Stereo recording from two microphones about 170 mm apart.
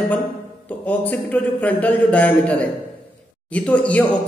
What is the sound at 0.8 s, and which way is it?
A man's voice, 10° left (ahead or behind).